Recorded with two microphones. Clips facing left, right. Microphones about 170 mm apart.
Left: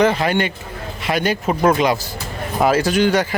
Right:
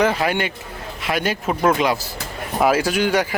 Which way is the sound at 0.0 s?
5° right (ahead or behind).